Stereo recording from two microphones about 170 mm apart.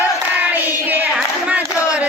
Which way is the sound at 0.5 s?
10° right (ahead or behind).